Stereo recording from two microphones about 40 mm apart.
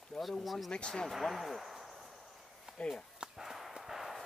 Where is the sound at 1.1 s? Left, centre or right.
Centre.